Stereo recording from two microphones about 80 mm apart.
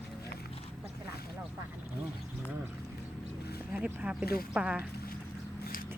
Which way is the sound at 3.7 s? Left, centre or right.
Right.